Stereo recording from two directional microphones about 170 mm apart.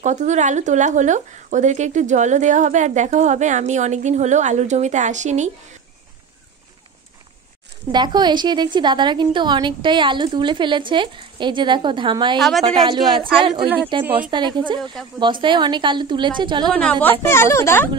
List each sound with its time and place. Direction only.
0.0 s speech: 45° right (ahead or behind)
7.9 s a woman's voice: 25° right (ahead or behind)
12.4 s speech: centre (ahead or behind)
12.6 s a woman's voice: 30° right (ahead or behind)
15.0 s speech: centre (ahead or behind)
15.4 s a woman's voice: 25° right (ahead or behind)
16.6 s a woman's voice: 5° left (ahead or behind)